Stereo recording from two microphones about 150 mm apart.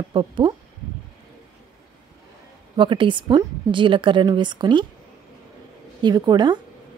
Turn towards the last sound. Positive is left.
turn(degrees=-30)  # may be behind; listen again after turning